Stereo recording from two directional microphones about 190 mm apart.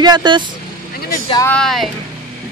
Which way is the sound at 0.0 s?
25° right (ahead or behind).